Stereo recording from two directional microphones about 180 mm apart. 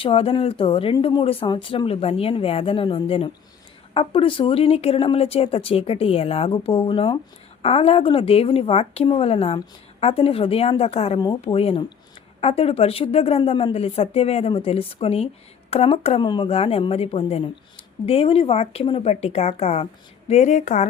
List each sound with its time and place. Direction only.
0.0 s speech: 30° left (ahead or behind)